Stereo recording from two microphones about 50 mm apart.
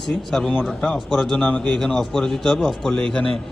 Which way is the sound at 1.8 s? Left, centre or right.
Centre.